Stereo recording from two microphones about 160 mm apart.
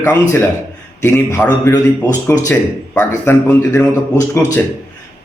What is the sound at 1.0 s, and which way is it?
A man's voice, 15° left (ahead or behind).